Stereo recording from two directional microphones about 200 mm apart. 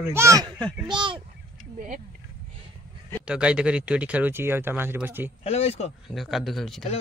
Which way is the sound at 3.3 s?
5° right (ahead or behind).